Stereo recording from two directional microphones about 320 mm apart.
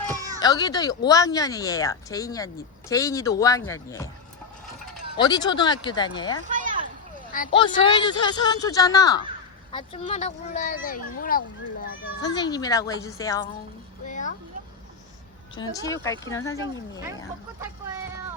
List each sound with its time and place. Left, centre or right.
0.3 s speech: centre
5.1 s speech: centre
6.5 s a sound: right
7.3 s speech: left
7.6 s speech: centre
12.2 s speech: centre
14.1 s a sound: left
15.5 s speech: centre